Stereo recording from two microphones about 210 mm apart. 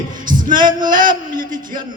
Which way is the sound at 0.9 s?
40° right (ahead or behind).